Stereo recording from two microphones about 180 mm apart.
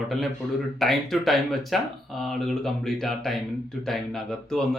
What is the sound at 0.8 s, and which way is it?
A man's voice, centre (ahead or behind).